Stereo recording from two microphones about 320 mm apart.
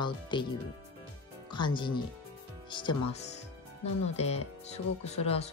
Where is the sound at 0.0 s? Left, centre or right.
Centre.